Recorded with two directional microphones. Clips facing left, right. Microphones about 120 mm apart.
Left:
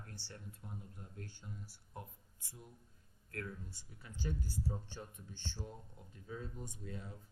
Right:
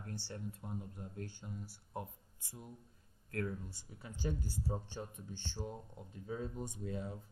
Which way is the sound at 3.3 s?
25° right (ahead or behind).